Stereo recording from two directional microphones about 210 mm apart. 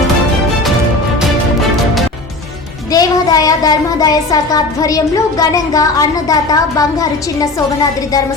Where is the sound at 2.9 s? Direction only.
15° left (ahead or behind).